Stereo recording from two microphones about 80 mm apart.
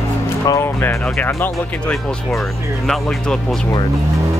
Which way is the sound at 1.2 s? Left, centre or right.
Left.